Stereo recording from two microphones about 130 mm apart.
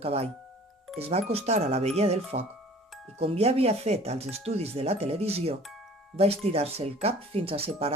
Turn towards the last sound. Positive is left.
turn(degrees=-50)  # may be behind; listen again after turning